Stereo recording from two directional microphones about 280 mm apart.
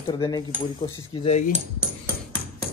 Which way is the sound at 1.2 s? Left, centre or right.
Left.